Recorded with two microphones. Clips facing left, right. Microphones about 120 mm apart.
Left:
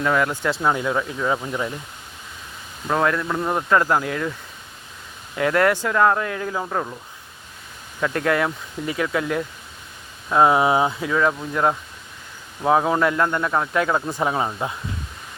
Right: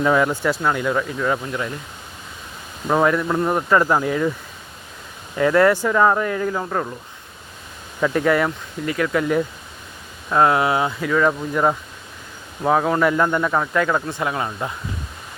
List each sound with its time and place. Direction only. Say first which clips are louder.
0.0 s speech: right 3 dB; 15° right (ahead or behind)
0.6 s speech: right 1 dB; 15° left (ahead or behind)
2.8 s speech: right 3 dB; 10° right (ahead or behind)
5.4 s speech: right 3 dB; centre (ahead or behind)
8.0 s speech: right 3 dB; 5° right (ahead or behind)
10.5 s speech: left 1 dB; 20° left (ahead or behind)
11.1 s speech: right 2 dB; centre (ahead or behind)
13.0 s speech: right 2 dB; 5° right (ahead or behind)
13.7 s speech: right 1 dB; 10° left (ahead or behind)